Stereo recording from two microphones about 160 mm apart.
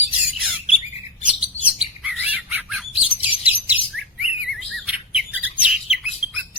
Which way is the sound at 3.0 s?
35° left (ahead or behind).